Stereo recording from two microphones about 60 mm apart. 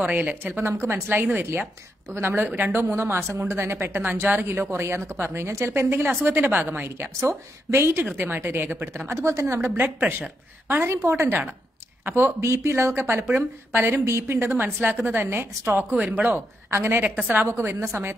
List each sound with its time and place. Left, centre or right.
0.0 s speech: right
0.4 s a woman's voice: right
1.0 s a woman's voice: right
2.8 s a woman's voice: right
7.2 s a woman's voice: right
9.8 s a woman's voice: right
12.4 s a woman's voice: right
13.7 s a woman's voice: right
14.0 s a woman's voice: right
14.5 s a woman's voice: right
16.0 s a woman's voice: right
16.7 s a woman's voice: right
17.2 s a woman's voice: right
17.5 s a woman's voice: right